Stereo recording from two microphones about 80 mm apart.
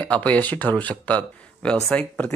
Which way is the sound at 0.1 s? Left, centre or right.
Centre.